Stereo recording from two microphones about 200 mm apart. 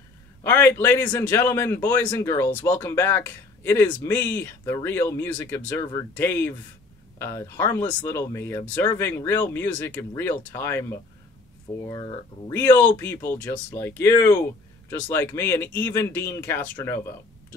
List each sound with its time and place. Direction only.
0.4 s a man's voice: 10° left (ahead or behind)